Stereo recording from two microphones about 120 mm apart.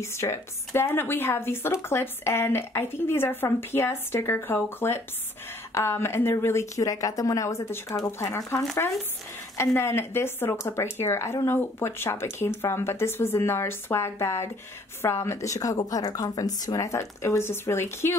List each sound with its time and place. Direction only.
0.0 s speech: 20° left (ahead or behind)